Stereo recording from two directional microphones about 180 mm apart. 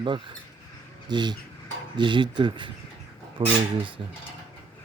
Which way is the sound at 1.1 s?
25° right (ahead or behind).